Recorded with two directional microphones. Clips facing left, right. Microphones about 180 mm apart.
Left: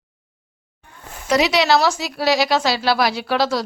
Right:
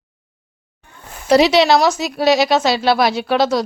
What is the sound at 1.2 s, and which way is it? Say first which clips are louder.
A woman's voice: right 5 dB; 30° right (ahead or behind).